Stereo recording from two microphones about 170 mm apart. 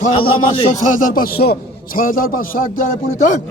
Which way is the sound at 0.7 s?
50° left (ahead or behind).